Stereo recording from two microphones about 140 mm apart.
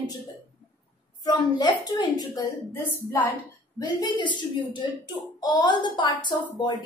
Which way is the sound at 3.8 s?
35° left (ahead or behind).